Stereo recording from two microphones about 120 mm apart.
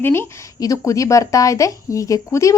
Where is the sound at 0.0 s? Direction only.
20° left (ahead or behind).